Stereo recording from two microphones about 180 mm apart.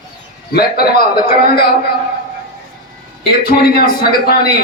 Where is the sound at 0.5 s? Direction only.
60° left (ahead or behind).